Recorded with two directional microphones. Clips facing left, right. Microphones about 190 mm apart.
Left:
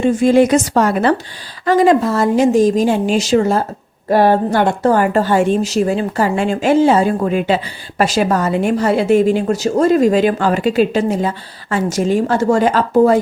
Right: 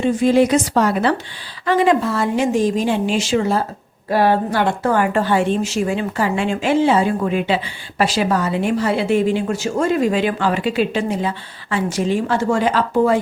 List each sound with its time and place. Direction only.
0.0 s a woman's voice: 50° left (ahead or behind)